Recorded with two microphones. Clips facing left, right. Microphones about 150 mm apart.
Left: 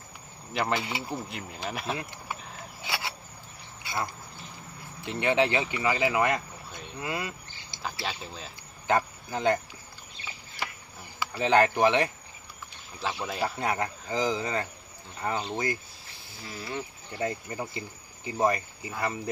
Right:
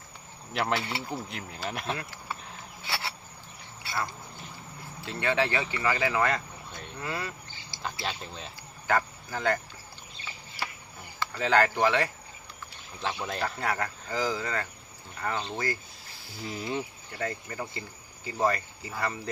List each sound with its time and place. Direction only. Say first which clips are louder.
0.5 s speech: even; centre (ahead or behind)
0.8 s speech: left 1 dB; 10° left (ahead or behind)
2.0 s speech: left 2 dB; 20° left (ahead or behind)
2.8 s cricket: left 1 dB; 15° left (ahead or behind)
3.8 s speech: left 1 dB; 15° left (ahead or behind)
6.7 s vehicle: even; centre (ahead or behind)
7.0 s a sound: left 2 dB; 15° left (ahead or behind)
7.8 s speech: even; centre (ahead or behind)
8.9 s speech: left 2 dB; 20° left (ahead or behind)
11.2 s speech: left 2 dB; 15° left (ahead or behind)
13.0 s speech: left 1 dB; 5° left (ahead or behind)
13.6 s speech: left 2 dB; 20° left (ahead or behind)
16.6 s speech: right 3 dB; 20° right (ahead or behind)
17.1 s speech: left 3 dB; 20° left (ahead or behind)